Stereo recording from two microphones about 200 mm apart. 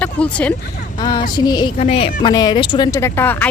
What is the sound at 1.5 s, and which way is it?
A woman's voice, 20° left (ahead or behind).